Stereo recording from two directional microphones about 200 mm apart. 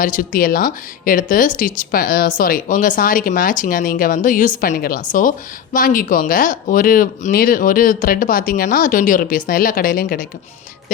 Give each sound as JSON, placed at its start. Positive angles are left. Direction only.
{"t": 0.0, "sound": "speech", "side_deg": 45}